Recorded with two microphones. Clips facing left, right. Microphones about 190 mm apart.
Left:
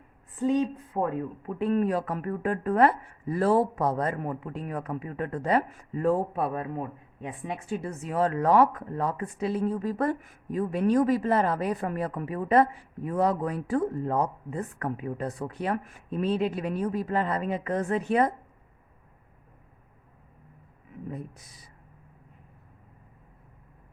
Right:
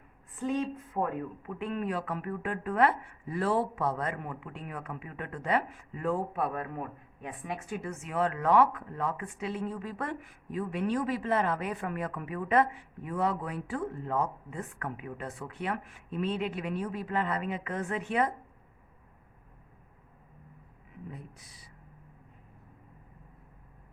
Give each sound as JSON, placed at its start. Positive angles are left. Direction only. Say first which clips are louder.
{"t": 0.9, "sound": "speech", "louder": "left 3 dB", "side_deg": 20}
{"t": 1.4, "sound": "speech", "louder": "left 9 dB", "side_deg": 35}
{"t": 21.1, "sound": "speech", "louder": "left 11 dB", "side_deg": 45}